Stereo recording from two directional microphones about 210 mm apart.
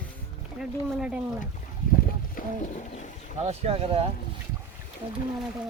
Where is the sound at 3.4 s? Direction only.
30° right (ahead or behind).